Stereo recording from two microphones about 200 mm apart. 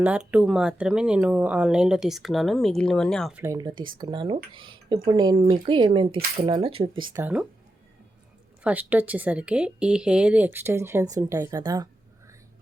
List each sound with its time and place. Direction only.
0.0 s speech: 5° right (ahead or behind)
3.4 s speech: 15° right (ahead or behind)
7.2 s speech: 10° right (ahead or behind)
8.6 s speech: 10° right (ahead or behind)